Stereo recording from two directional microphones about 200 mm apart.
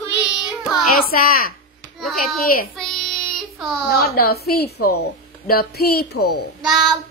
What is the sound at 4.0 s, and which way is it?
A woman's voice, 50° left (ahead or behind).